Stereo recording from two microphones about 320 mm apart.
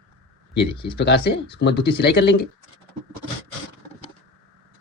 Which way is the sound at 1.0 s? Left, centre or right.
Left.